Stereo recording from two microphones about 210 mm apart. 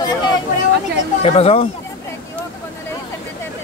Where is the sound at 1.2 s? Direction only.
25° left (ahead or behind).